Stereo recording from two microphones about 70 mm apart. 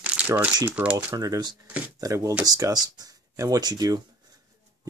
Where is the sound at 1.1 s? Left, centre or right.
Right.